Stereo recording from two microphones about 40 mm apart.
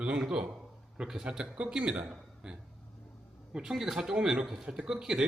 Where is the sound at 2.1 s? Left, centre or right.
Centre.